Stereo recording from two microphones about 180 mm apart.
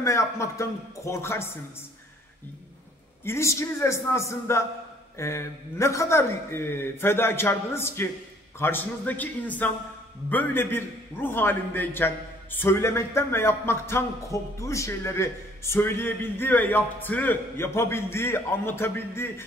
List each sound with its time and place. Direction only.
0.0 s speech: 15° left (ahead or behind)
3.3 s speech: 15° left (ahead or behind)